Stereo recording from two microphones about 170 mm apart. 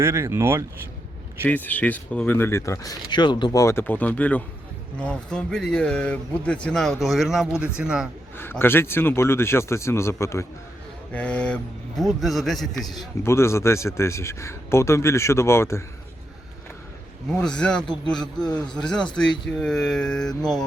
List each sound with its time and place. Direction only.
0.0 s speech: 15° right (ahead or behind)
1.5 s speech: 10° left (ahead or behind)
8.4 s speech: 10° left (ahead or behind)
13.2 s speech: 15° left (ahead or behind)
17.2 s speech: 5° left (ahead or behind)